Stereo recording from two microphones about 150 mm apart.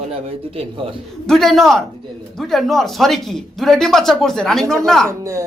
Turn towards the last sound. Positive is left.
turn(degrees=-20)  # may be behind; listen again after turning